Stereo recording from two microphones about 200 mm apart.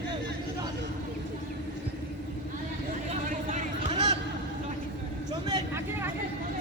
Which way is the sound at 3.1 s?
40° right (ahead or behind).